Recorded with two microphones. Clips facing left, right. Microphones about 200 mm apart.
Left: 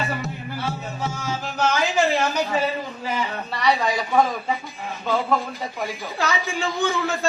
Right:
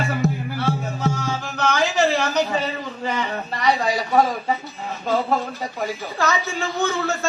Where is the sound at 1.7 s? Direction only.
45° right (ahead or behind).